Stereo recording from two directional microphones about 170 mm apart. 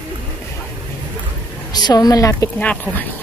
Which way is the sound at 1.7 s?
25° left (ahead or behind).